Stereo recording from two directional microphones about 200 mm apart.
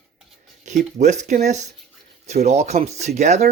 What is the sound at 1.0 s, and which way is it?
Speech, 35° right (ahead or behind).